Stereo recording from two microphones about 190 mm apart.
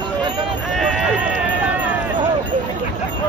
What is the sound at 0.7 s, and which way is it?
Sheep, centre (ahead or behind).